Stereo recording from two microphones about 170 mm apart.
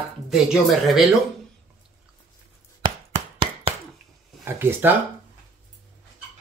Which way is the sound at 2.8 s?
35° right (ahead or behind).